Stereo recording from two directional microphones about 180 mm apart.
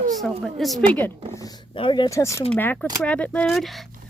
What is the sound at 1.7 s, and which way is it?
Speech, 25° left (ahead or behind).